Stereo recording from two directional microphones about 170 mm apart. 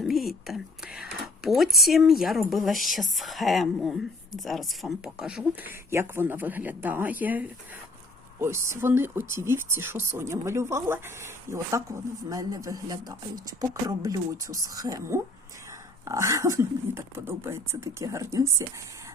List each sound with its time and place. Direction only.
0.0 s whispering: centre (ahead or behind)
1.8 s speech: centre (ahead or behind); by 18.6 s 15° right (ahead or behind)